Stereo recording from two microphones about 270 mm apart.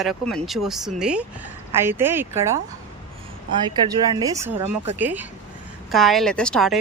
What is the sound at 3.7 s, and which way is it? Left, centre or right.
Speech, centre.